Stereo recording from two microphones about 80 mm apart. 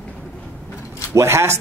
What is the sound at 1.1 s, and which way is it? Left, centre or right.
Speech, right.